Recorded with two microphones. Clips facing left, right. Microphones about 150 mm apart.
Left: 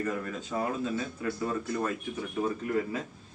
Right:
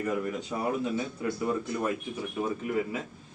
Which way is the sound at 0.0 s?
15° right (ahead or behind).